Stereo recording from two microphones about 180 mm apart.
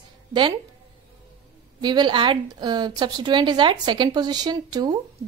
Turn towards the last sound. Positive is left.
turn(degrees=-25)  # may be behind; listen again after turning